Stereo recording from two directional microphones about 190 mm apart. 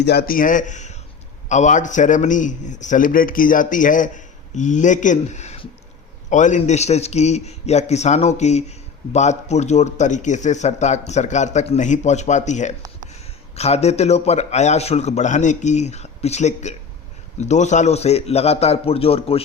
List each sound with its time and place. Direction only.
0.0 s a man's voice: 60° left (ahead or behind); by 19.4 s 30° left (ahead or behind)